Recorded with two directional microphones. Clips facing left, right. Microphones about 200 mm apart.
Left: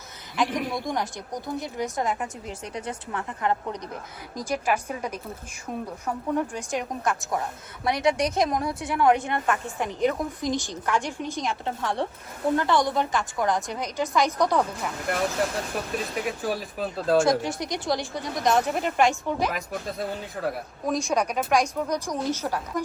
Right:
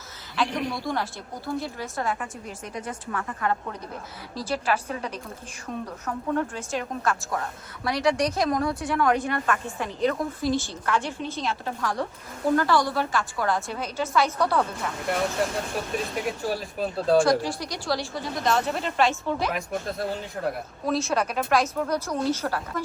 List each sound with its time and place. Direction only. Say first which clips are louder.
0.4 s speech: left 1 dB; centre (ahead or behind)
0.8 s a woman's voice: even; 15° left (ahead or behind)
16.2 s speech: even; centre (ahead or behind)
17.4 s a woman's voice: left 2 dB; 20° left (ahead or behind)
19.5 s speech: right 2 dB; centre (ahead or behind)
20.8 s a woman's voice: even; 15° left (ahead or behind)